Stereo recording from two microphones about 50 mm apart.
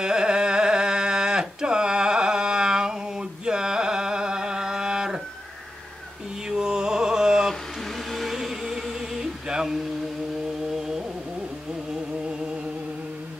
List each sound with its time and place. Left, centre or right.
0.0 s a sound: centre
6.5 s music: centre
8.1 s humming: centre